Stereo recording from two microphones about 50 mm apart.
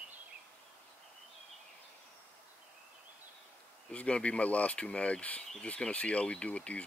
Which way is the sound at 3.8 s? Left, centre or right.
Left.